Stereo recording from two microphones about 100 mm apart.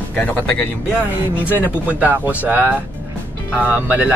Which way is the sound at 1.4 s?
20° left (ahead or behind).